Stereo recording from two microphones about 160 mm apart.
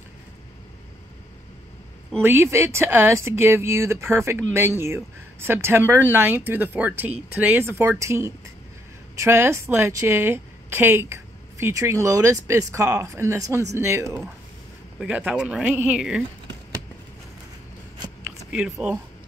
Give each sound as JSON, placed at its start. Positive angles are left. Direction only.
{"t": 2.1, "sound": "speech", "side_deg": -15}
{"t": 18.5, "sound": "speech", "side_deg": -5}